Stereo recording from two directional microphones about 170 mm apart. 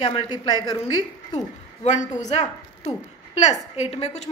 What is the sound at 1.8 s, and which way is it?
Speech, 45° left (ahead or behind).